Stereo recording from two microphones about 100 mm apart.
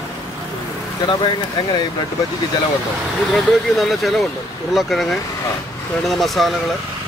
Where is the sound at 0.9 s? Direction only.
50° left (ahead or behind).